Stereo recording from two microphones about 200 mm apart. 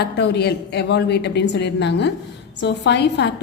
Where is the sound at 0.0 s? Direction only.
55° left (ahead or behind).